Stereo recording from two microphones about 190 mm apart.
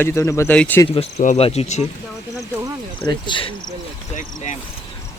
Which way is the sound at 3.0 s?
25° left (ahead or behind).